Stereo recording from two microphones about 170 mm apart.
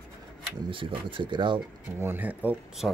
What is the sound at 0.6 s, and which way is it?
Speech, 30° right (ahead or behind).